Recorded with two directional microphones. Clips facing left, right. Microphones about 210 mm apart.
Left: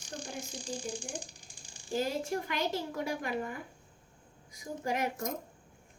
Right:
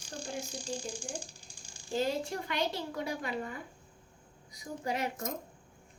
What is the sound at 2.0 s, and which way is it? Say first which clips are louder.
Child singing: even; 45° left (ahead or behind).